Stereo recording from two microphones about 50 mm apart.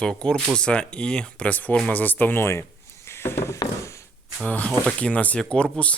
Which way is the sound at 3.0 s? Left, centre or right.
Left.